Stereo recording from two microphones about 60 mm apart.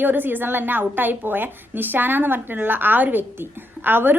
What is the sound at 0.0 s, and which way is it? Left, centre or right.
A woman's voice, right.